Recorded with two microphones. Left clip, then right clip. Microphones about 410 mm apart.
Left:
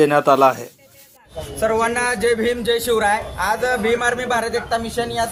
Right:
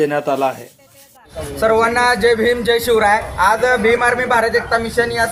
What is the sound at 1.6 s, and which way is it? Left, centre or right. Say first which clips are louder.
A man's voice: right 5 dB; left.